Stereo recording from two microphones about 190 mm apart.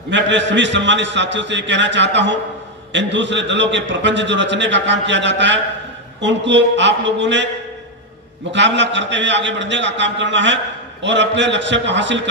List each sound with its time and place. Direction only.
0.1 s a man's voice: 70° right (ahead or behind)
8.5 s a man's voice: 70° right (ahead or behind)